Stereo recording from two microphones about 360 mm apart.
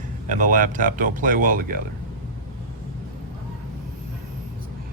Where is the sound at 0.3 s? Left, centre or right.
Right.